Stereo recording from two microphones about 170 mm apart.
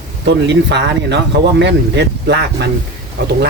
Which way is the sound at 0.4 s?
90° right.